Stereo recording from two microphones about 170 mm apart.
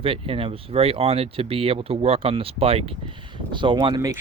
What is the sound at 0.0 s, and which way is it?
Speech, 30° right (ahead or behind).